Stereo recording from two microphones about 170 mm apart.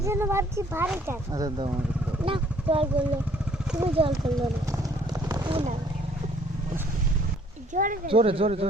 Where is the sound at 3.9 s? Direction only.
30° right (ahead or behind).